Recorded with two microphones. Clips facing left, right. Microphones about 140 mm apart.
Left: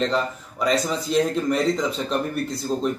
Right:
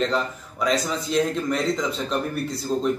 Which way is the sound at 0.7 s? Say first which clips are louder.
Left 2 dB; centre (ahead or behind).